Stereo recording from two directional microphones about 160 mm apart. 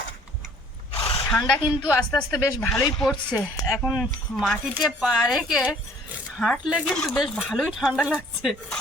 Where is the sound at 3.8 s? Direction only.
5° right (ahead or behind).